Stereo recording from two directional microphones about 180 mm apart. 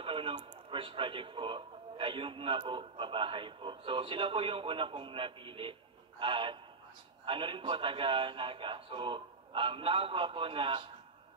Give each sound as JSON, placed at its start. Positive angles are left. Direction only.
{"t": 0.0, "sound": "speech", "side_deg": -30}